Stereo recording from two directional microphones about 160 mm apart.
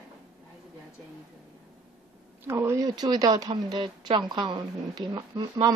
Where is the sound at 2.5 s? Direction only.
15° right (ahead or behind).